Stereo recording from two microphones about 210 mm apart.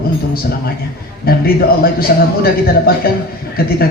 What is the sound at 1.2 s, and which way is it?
A man's voice, 45° left (ahead or behind).